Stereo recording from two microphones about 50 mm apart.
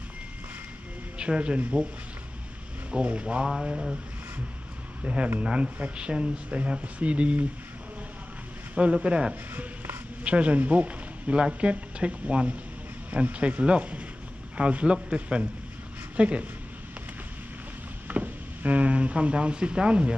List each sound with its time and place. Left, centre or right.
1.1 s speech: right
2.9 s speech: right
5.0 s speech: right
8.7 s speech: right
9.3 s a man's voice: right
18.0 s speech: right